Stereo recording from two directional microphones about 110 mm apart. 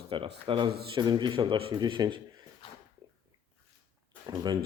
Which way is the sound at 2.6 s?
50° left (ahead or behind).